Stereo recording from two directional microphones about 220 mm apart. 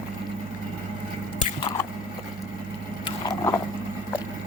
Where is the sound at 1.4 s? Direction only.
20° left (ahead or behind).